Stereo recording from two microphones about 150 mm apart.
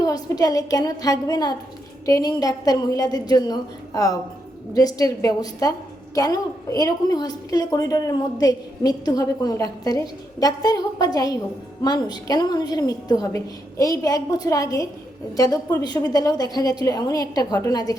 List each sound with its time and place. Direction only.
0.0 s a woman's voice: 25° left (ahead or behind)